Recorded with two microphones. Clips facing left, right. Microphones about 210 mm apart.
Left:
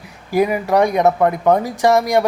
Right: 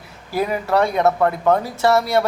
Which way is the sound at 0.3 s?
15° left (ahead or behind).